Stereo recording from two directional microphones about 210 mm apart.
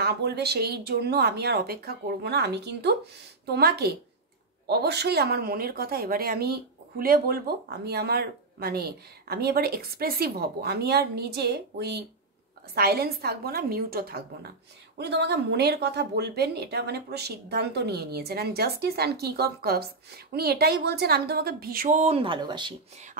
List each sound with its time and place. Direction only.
0.0 s a woman's voice: 50° right (ahead or behind); by 22.8 s 20° right (ahead or behind)